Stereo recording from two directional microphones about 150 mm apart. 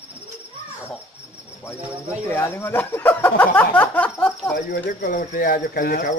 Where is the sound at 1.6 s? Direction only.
15° left (ahead or behind).